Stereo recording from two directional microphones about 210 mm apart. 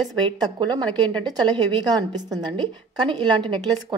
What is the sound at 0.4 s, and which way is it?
Speech, 20° right (ahead or behind).